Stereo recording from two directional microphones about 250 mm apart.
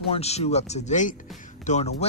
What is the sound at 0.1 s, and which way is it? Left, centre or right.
A man's voice, left.